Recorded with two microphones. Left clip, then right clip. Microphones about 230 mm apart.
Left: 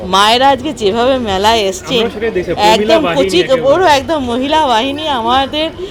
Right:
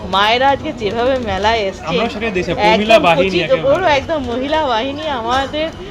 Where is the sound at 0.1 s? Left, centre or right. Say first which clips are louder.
Left 4 dB; left.